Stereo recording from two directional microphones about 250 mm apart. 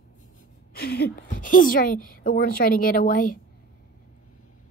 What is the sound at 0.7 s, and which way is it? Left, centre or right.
A woman's voice, left.